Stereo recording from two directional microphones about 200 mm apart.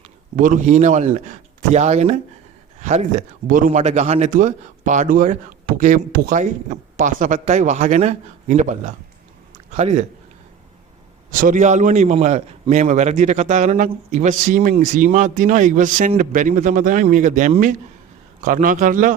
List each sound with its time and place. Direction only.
0.3 s a man's voice: 40° right (ahead or behind)
11.3 s a man's voice: 40° right (ahead or behind)